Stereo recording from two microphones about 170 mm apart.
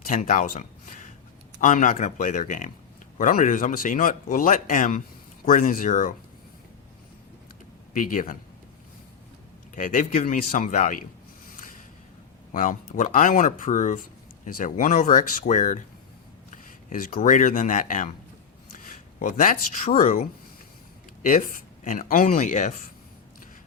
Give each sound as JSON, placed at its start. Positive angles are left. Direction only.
{"t": 0.1, "sound": "speech", "side_deg": 50}
{"t": 7.9, "sound": "speech", "side_deg": 50}
{"t": 9.7, "sound": "speech", "side_deg": 50}
{"t": 12.5, "sound": "speech", "side_deg": 50}